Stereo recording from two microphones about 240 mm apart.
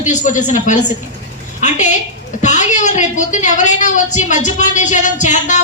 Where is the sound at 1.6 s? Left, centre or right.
Left.